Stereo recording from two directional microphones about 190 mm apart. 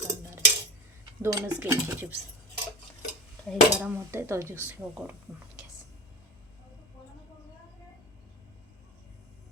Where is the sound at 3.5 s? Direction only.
10° right (ahead or behind).